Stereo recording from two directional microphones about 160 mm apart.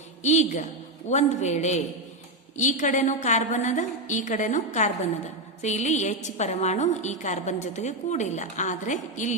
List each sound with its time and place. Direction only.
0.2 s a woman's voice: 45° left (ahead or behind)